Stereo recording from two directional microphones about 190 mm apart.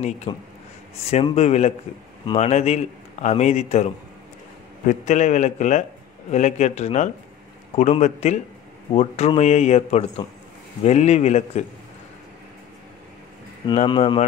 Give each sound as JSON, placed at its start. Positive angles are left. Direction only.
{"t": 0.3, "sound": "a man's voice", "side_deg": 30}
{"t": 13.7, "sound": "speech", "side_deg": 30}